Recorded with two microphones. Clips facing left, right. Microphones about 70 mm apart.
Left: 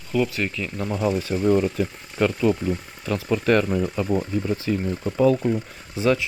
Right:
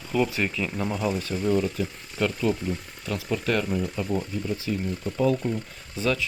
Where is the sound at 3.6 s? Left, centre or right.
Left.